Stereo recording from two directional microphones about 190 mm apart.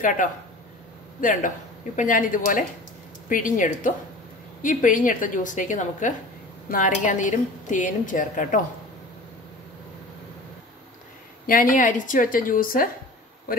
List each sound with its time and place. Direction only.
1.2 s a woman's voice: 45° left (ahead or behind)
11.4 s a woman's voice: 45° left (ahead or behind)